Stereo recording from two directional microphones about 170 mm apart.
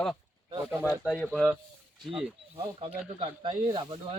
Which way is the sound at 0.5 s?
15° right (ahead or behind).